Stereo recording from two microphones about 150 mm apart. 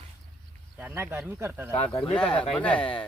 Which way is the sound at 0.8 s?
15° right (ahead or behind).